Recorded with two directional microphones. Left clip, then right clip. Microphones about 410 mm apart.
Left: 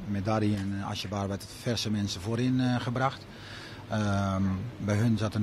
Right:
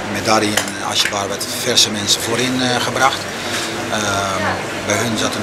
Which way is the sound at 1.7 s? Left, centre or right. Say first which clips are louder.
Right 18 dB; left.